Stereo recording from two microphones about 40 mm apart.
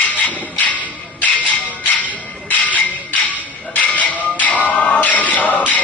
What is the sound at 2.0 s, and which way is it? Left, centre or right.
Music, left.